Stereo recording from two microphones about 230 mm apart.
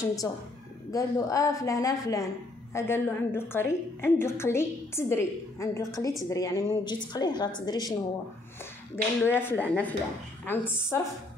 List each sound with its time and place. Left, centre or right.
0.0 s a woman's voice: centre